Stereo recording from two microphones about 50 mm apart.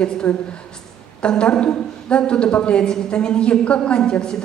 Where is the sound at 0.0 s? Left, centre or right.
Left.